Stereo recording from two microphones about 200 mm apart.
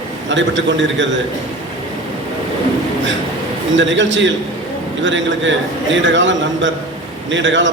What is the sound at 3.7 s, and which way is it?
A man's voice, 70° right (ahead or behind).